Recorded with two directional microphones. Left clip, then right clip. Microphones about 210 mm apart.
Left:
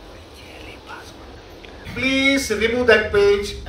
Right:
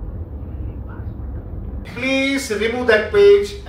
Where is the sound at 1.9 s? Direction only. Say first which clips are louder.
Left 1 dB; 50° left (ahead or behind).